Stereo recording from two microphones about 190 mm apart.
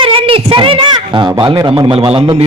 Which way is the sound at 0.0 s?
30° right (ahead or behind).